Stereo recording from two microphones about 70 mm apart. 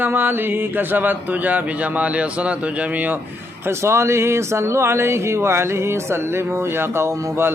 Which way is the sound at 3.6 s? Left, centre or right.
Right.